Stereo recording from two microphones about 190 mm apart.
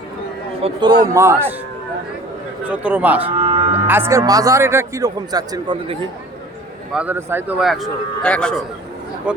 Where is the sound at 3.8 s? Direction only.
10° right (ahead or behind).